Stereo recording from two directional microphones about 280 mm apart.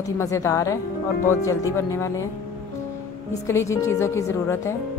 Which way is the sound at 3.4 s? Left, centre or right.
Centre.